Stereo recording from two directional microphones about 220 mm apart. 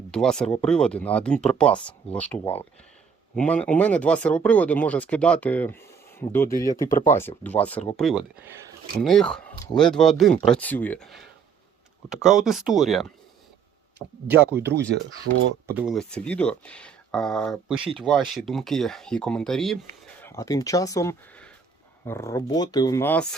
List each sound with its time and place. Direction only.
0.1 s speech: 5° left (ahead or behind)
14.0 s speech: 15° left (ahead or behind)
14.9 s speech: 55° right (ahead or behind)
15.3 s speech: 75° right (ahead or behind)
15.6 s speech: 5° right (ahead or behind)
20.2 s speech: 15° left (ahead or behind)